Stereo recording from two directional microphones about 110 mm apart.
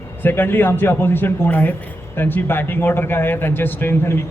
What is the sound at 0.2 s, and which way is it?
Speech, 20° left (ahead or behind).